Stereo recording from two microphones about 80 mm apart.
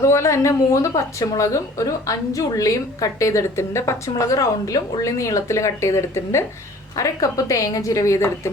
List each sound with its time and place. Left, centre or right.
0.0 s a woman's voice: left
6.9 s a woman's voice: left